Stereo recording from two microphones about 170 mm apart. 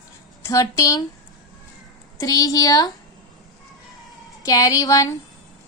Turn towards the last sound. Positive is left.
turn(degrees=20)  # may be behind; listen again after turning